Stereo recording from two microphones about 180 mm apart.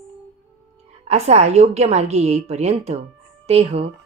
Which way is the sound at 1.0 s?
35° right (ahead or behind).